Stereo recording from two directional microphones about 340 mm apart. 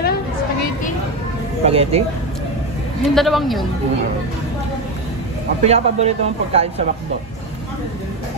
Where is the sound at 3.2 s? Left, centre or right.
Centre.